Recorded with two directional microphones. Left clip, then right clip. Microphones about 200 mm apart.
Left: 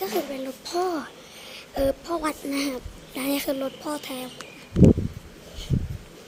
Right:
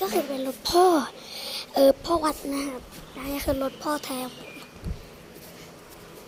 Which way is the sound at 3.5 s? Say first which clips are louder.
Right 2 dB; centre (ahead or behind).